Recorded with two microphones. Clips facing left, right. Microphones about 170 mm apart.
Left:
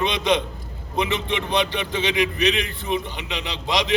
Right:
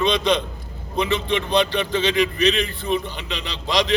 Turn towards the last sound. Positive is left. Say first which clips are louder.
# right 2 dB
turn(degrees=20)  # may be behind; listen again after turning